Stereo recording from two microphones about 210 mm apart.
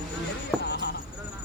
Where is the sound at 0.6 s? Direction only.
55° left (ahead or behind).